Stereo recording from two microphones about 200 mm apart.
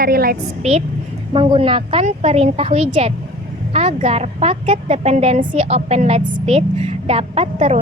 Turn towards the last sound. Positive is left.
turn(degrees=-35)  # may be behind; listen again after turning